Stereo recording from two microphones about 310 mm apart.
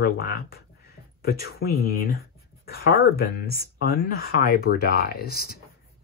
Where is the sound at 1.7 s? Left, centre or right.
Centre.